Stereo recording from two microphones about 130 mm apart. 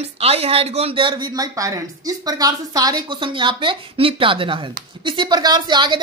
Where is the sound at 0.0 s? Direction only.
50° right (ahead or behind).